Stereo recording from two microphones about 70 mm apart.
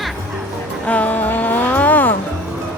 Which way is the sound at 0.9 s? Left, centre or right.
Left.